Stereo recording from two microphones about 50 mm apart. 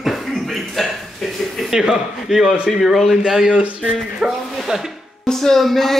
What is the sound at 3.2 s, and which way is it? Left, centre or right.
Speech, centre.